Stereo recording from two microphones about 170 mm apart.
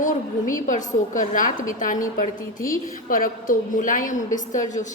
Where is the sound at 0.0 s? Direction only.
50° left (ahead or behind).